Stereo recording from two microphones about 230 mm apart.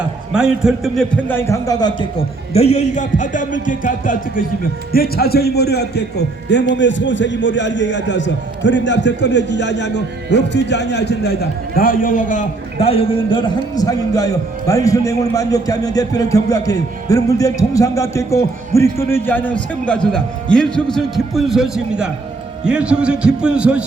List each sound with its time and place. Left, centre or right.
0.3 s a man's voice: centre